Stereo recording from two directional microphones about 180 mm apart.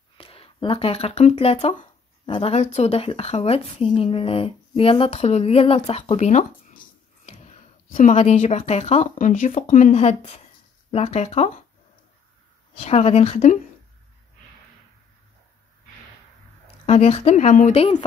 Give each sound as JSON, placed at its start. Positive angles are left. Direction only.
{"t": 0.2, "sound": "speech", "side_deg": 30}
{"t": 7.9, "sound": "speech", "side_deg": 45}
{"t": 9.9, "sound": "speech", "side_deg": 35}
{"t": 12.7, "sound": "speech", "side_deg": 35}
{"t": 16.8, "sound": "speech", "side_deg": 35}